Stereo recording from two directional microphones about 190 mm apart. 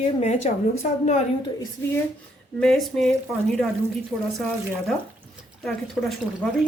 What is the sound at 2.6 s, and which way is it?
Speech, centre (ahead or behind).